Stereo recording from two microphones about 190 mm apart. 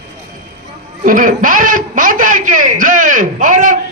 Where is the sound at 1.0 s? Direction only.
45° right (ahead or behind).